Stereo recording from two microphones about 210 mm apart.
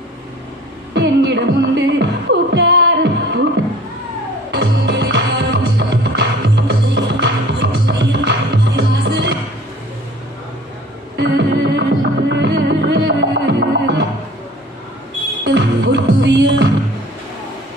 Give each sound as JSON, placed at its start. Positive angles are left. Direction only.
{"t": 0.9, "sound": "music", "side_deg": -55}
{"t": 4.6, "sound": "music", "side_deg": -55}
{"t": 11.1, "sound": "music", "side_deg": -55}
{"t": 15.4, "sound": "music", "side_deg": -55}